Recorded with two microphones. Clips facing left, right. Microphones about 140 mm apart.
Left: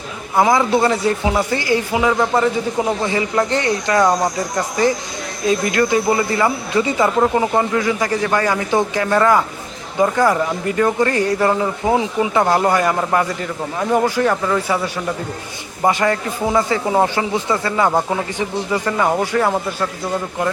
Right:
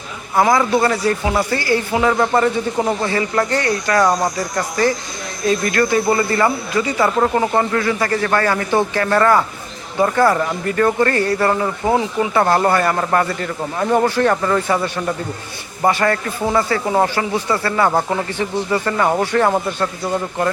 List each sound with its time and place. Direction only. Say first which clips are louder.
0.3 s a man's voice: even; 20° left (ahead or behind)
6.7 s a man's voice: left 2 dB; 25° left (ahead or behind)
7.2 s speech: even; 10° left (ahead or behind)